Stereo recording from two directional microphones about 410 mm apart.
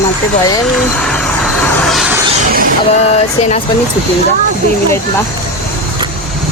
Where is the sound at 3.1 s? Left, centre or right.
Centre.